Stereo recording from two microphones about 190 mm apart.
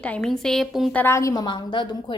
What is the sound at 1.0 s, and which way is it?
A woman's voice, 15° left (ahead or behind).